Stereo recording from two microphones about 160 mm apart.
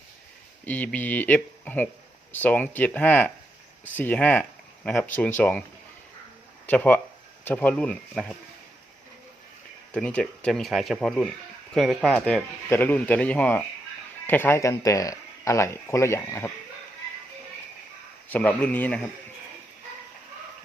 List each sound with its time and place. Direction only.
0.6 s speech: 10° left (ahead or behind)
6.7 s speech: 10° left (ahead or behind)
9.9 s speech: 10° left (ahead or behind)
18.3 s speech: 10° left (ahead or behind)